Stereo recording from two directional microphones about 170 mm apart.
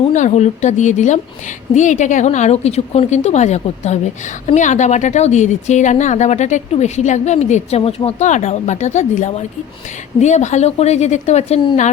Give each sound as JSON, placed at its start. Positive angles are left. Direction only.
{"t": 0.1, "sound": "a woman's voice", "side_deg": 45}